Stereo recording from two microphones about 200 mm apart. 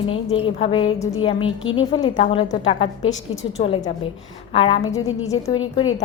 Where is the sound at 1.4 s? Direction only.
80° left.